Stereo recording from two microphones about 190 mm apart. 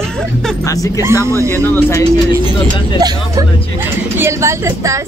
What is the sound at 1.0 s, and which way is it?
Speech, 15° right (ahead or behind).